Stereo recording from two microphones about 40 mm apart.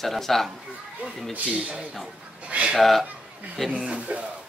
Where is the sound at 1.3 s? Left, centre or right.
Right.